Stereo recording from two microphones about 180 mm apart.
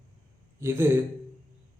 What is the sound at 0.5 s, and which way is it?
Speech, 15° right (ahead or behind).